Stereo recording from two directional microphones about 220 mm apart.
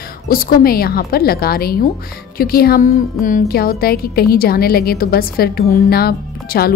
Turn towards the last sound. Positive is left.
turn(degrees=45)  # may be behind; listen again after turning